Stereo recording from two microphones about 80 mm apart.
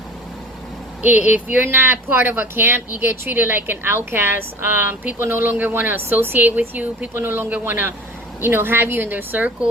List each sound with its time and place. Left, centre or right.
1.0 s speech: right